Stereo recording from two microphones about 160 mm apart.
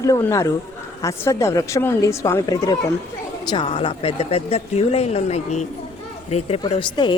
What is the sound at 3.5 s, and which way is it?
Speech, 35° left (ahead or behind).